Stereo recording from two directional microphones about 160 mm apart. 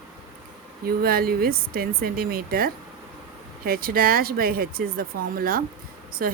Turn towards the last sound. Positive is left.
turn(degrees=-60)  # may be behind; listen again after turning